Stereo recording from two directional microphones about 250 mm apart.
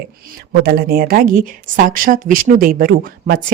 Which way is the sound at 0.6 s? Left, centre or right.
Right.